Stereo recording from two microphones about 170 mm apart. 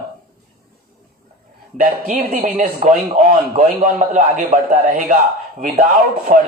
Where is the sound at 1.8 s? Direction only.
55° right (ahead or behind).